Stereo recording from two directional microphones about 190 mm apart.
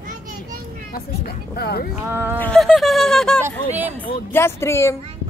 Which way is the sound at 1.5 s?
55° left (ahead or behind).